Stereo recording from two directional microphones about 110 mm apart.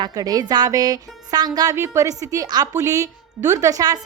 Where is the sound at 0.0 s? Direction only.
35° right (ahead or behind).